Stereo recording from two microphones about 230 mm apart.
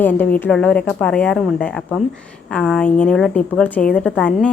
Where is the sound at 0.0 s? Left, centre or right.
Centre.